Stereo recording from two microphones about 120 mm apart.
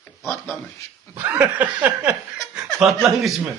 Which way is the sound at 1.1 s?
15° right (ahead or behind).